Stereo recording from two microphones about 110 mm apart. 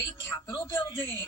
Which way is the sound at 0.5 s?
20° left (ahead or behind).